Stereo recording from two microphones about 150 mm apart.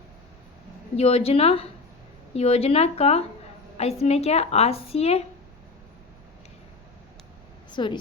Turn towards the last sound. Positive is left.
turn(degrees=30)  # may be behind; listen again after turning